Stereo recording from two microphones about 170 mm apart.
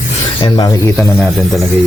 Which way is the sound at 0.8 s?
15° left (ahead or behind).